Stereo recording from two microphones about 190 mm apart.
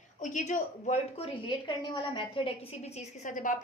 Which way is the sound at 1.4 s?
25° left (ahead or behind).